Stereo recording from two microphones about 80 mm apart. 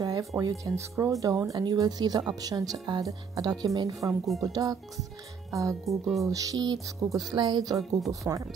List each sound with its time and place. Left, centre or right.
0.0 s music: right
0.4 s speech: right
5.9 s speech: centre
6.2 s speech: right
7.0 s speech: right
7.3 s speech: right